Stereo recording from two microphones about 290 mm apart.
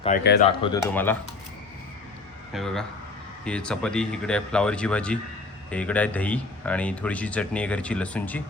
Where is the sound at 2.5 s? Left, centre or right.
Centre.